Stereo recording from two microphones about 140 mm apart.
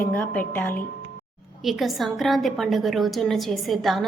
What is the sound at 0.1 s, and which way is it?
Speech, 10° left (ahead or behind).